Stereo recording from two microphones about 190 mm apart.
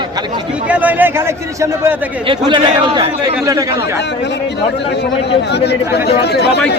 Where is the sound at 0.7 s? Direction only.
10° right (ahead or behind).